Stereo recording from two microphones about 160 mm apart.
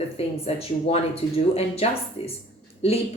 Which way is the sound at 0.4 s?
40° left (ahead or behind).